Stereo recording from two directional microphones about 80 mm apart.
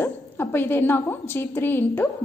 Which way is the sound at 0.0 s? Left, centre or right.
Left.